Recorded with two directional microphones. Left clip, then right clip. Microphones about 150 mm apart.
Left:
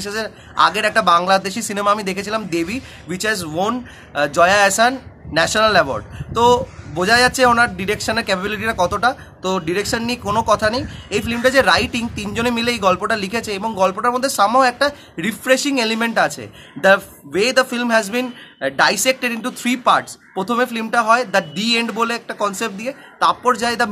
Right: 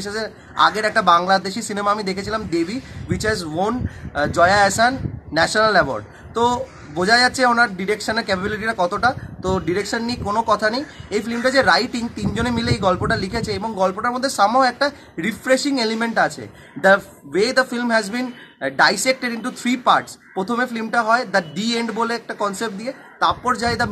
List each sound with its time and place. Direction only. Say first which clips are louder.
0.0 s speech: left 2 dB; 15° left (ahead or behind)